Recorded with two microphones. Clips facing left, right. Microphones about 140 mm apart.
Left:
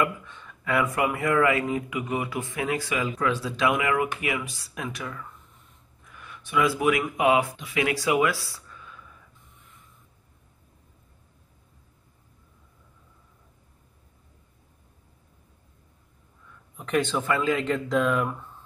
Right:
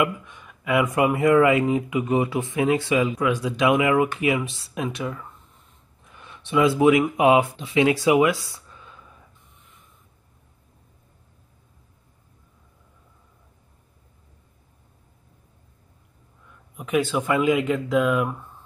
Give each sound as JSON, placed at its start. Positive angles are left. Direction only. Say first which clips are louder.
{"t": 0.0, "sound": "speech", "louder": "right 3 dB", "side_deg": -15}
{"t": 16.7, "sound": "speech", "louder": "right 3 dB", "side_deg": -10}